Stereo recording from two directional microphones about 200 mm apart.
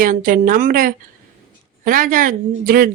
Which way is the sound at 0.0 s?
45° right (ahead or behind).